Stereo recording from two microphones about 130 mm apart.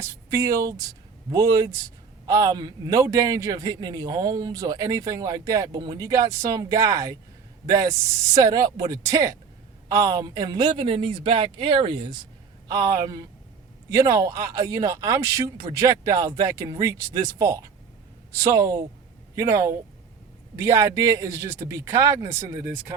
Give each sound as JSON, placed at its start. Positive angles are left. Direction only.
{"t": 0.0, "sound": "speech", "side_deg": -25}